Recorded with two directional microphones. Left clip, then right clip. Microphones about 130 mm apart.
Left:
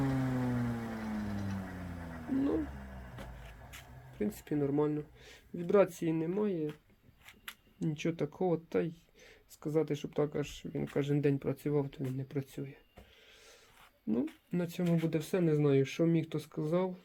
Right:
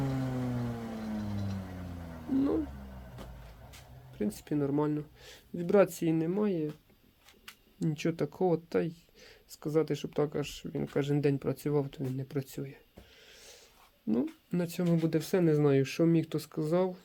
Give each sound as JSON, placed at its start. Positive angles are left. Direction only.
{"t": 0.0, "sound": "music", "side_deg": 0}
{"t": 4.2, "sound": "speech", "side_deg": -10}
{"t": 7.8, "sound": "speech", "side_deg": -35}
{"t": 14.1, "sound": "speech", "side_deg": -25}
{"t": 14.8, "sound": "speech", "side_deg": -40}